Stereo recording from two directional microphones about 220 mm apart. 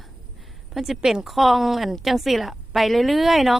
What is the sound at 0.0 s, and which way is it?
A woman's voice, centre (ahead or behind).